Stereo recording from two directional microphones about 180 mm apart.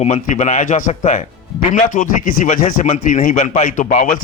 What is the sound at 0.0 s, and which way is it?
Speech, 40° left (ahead or behind).